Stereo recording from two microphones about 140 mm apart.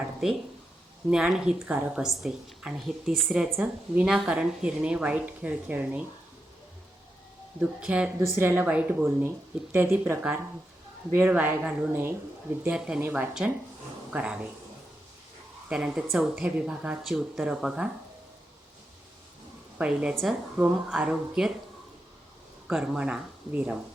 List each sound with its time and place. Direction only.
0.0 s a sound: 5° right (ahead or behind)
1.1 s a woman's voice: 5° right (ahead or behind)
7.6 s speech: 10° right (ahead or behind)
15.7 s a woman's voice: 5° right (ahead or behind)
19.8 s speech: 10° right (ahead or behind)
22.6 s speech: 5° right (ahead or behind)